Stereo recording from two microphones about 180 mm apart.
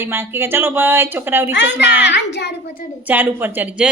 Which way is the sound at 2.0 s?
75° left (ahead or behind).